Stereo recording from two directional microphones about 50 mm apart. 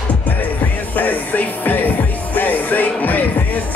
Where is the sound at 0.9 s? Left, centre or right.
Left.